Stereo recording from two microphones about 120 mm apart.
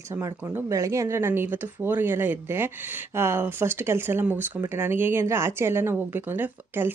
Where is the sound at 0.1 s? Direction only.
20° right (ahead or behind).